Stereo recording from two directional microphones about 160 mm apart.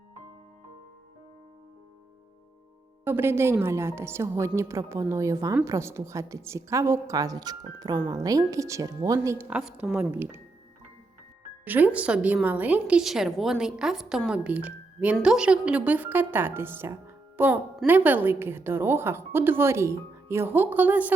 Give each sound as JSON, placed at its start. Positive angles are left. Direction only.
{"t": 3.0, "sound": "a woman's voice", "side_deg": -15}
{"t": 11.6, "sound": "a woman's voice", "side_deg": -10}